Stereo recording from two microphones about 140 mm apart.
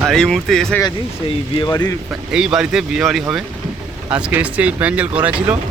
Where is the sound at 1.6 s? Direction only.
30° left (ahead or behind).